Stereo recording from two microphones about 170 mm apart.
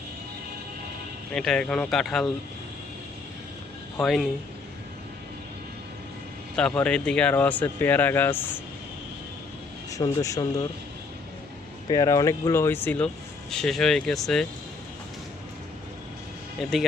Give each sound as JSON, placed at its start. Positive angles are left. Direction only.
{"t": 1.3, "sound": "speech", "side_deg": 5}
{"t": 3.9, "sound": "speech", "side_deg": 0}
{"t": 6.6, "sound": "speech", "side_deg": 5}
{"t": 9.9, "sound": "speech", "side_deg": 20}
{"t": 11.9, "sound": "speech", "side_deg": 20}
{"t": 16.6, "sound": "speech", "side_deg": 0}